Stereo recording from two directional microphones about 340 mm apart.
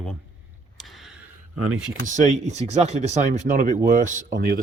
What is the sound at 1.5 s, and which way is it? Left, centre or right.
Speech, right.